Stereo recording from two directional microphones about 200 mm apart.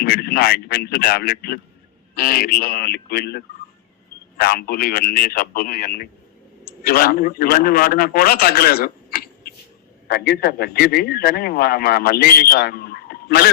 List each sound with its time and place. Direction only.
0.0 s a man's voice: 50° left (ahead or behind)